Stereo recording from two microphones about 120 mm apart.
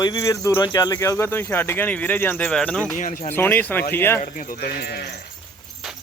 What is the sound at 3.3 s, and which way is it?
Speech, 15° left (ahead or behind).